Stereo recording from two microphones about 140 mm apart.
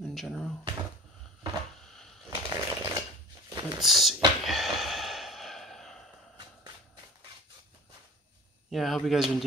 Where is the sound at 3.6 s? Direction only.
Centre (ahead or behind).